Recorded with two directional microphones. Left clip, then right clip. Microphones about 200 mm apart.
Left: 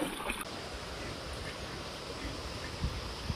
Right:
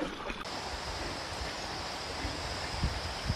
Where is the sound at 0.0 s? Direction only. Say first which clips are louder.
Left 1 dB; 55° left (ahead or behind).